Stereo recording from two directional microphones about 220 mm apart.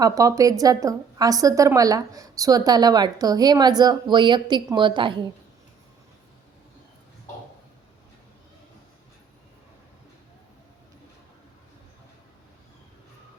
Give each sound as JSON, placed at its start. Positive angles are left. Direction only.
{"t": 0.0, "sound": "a woman's voice", "side_deg": -15}